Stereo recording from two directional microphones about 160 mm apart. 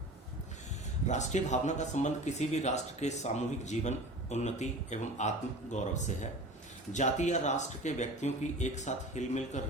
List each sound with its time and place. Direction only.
1.0 s speech: 45° left (ahead or behind)